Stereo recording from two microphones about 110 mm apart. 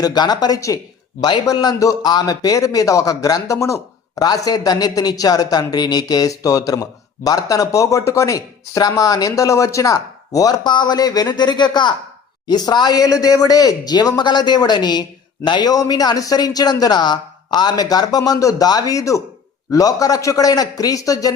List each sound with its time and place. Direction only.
0.0 s a man's voice: 40° left (ahead or behind)